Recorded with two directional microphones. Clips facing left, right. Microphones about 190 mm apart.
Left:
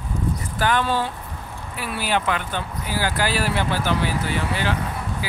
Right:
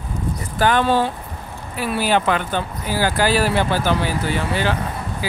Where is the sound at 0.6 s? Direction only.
30° right (ahead or behind).